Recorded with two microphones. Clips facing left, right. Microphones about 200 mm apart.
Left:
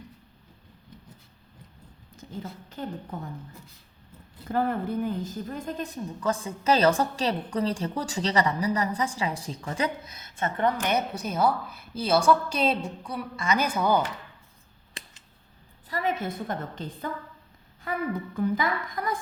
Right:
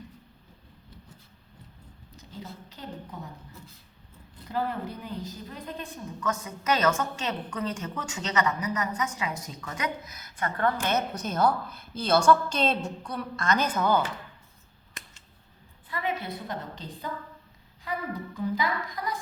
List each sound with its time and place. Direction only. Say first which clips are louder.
2.1 s a woman's voice: left 4 dB; 50° left (ahead or behind)
4.4 s a woman's voice: left 4 dB; 50° left (ahead or behind); by 14.0 s 10° left (ahead or behind)
15.9 s a woman's voice: left 3 dB; 40° left (ahead or behind)